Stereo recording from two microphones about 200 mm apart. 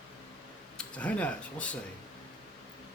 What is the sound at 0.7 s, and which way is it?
Speech, 5° left (ahead or behind).